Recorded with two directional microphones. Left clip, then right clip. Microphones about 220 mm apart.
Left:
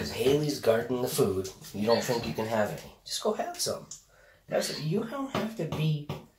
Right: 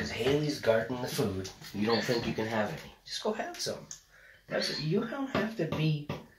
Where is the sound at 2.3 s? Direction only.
10° left (ahead or behind).